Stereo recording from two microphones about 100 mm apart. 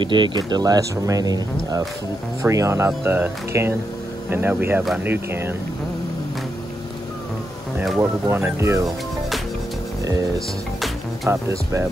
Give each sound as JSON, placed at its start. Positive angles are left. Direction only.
{"t": 0.0, "sound": "speech", "side_deg": -55}
{"t": 8.0, "sound": "speech", "side_deg": -25}
{"t": 11.2, "sound": "speech", "side_deg": -25}